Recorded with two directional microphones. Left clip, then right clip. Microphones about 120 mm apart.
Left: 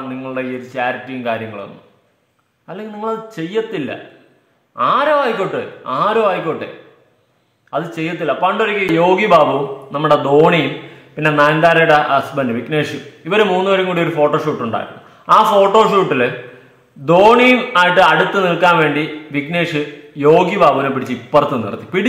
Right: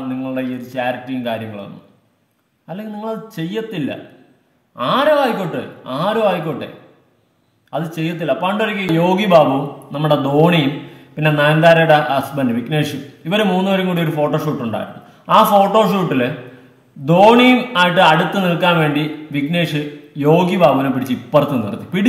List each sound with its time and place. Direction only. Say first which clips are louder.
0.1 s a man's voice: even; 20° right (ahead or behind)
2.7 s a man's voice: left 3 dB; 20° right (ahead or behind)
7.7 s a man's voice: left 2 dB; 20° right (ahead or behind)